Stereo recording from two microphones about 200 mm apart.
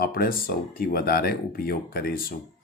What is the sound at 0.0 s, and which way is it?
Speech, 50° left (ahead or behind).